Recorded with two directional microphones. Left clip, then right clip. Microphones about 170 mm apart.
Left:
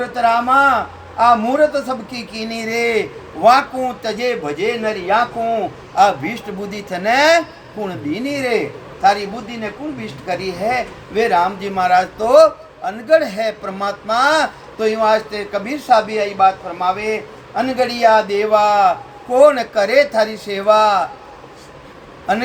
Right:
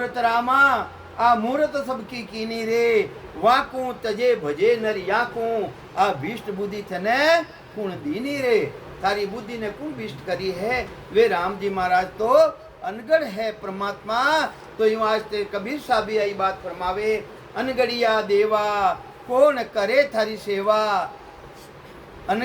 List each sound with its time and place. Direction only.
0.1 s a man's voice: 15° left (ahead or behind)
10.2 s a man's voice: 10° left (ahead or behind)
22.3 s a man's voice: 20° left (ahead or behind)